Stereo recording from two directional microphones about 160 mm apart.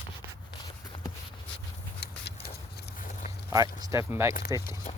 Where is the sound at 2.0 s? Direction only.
90° left.